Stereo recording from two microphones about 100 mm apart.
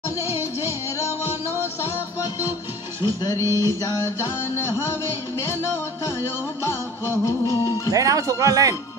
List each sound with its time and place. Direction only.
3.0 s music: 40° left (ahead or behind)
3.4 s speech: 30° right (ahead or behind)
6.6 s music: 30° left (ahead or behind)
7.9 s speech: 35° right (ahead or behind)